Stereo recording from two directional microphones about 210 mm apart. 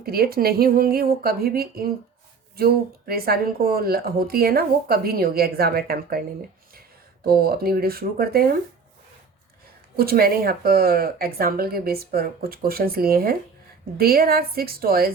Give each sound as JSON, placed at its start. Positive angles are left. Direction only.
{"t": 0.0, "sound": "a woman's voice", "side_deg": -45}
{"t": 7.3, "sound": "a woman's voice", "side_deg": -45}
{"t": 9.9, "sound": "a woman's voice", "side_deg": -45}